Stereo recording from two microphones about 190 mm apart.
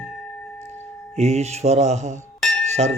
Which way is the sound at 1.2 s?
35° right (ahead or behind).